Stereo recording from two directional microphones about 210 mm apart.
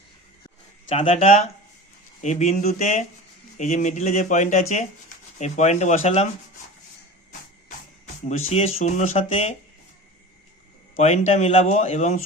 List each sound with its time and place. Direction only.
0.9 s speech: 30° left (ahead or behind)
8.3 s speech: 30° left (ahead or behind)
10.9 s speech: 35° left (ahead or behind)